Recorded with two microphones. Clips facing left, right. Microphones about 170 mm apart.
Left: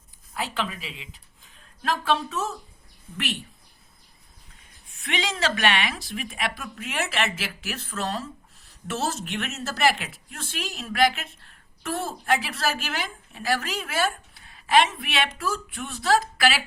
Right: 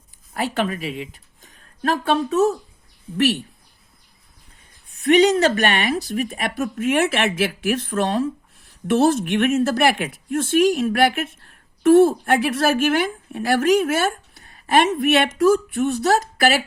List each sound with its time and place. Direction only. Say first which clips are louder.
0.3 s a sound: right 7 dB; 50° right (ahead or behind)
2.3 s speech: right 13 dB; 40° right (ahead or behind)
5.0 s speech: right 13 dB; 40° right (ahead or behind)